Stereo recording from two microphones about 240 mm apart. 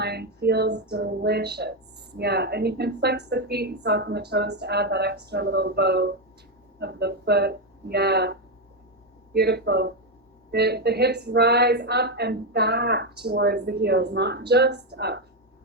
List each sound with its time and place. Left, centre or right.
0.0 s a woman's voice: right